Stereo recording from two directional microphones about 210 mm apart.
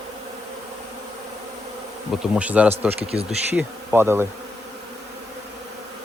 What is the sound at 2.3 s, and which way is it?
Speech, 5° right (ahead or behind).